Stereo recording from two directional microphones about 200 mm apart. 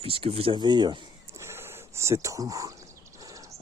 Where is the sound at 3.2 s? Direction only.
15° right (ahead or behind).